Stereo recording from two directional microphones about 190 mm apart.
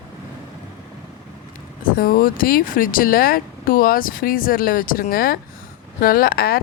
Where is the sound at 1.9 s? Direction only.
50° left (ahead or behind).